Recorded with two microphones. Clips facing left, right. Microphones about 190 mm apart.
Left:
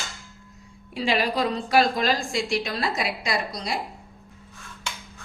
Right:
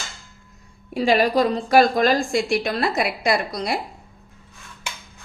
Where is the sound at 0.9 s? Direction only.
45° right (ahead or behind); by 3.8 s 60° right (ahead or behind).